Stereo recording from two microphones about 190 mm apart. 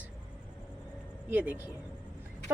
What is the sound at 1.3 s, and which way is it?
Speech, 10° right (ahead or behind).